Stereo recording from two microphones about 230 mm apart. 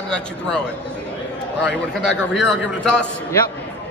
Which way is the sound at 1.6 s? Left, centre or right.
Left.